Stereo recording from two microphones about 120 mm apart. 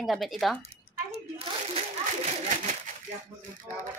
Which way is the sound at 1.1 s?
55° right (ahead or behind).